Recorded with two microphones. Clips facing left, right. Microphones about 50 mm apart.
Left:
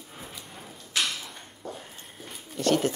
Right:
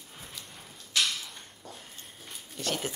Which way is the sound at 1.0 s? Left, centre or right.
Centre.